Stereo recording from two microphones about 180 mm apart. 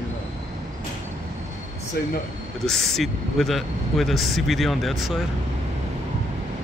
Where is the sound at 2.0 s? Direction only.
60° left (ahead or behind).